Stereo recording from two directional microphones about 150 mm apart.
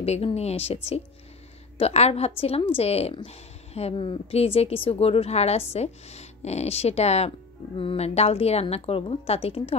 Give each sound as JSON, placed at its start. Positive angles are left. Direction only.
{"t": 0.0, "sound": "speech", "side_deg": 45}
{"t": 1.8, "sound": "speech", "side_deg": 45}